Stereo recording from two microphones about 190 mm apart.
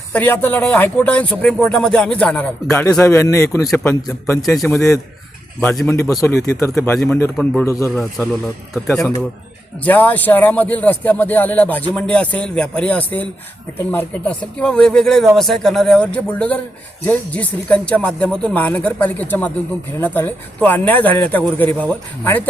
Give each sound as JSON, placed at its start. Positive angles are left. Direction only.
{"t": 0.1, "sound": "speech", "side_deg": 10}
{"t": 4.6, "sound": "speech", "side_deg": 15}
{"t": 8.9, "sound": "a man's voice", "side_deg": 5}